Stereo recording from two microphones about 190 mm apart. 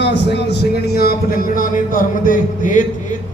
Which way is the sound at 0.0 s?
65° left (ahead or behind).